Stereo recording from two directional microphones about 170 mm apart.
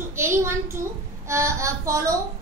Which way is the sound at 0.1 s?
15° right (ahead or behind).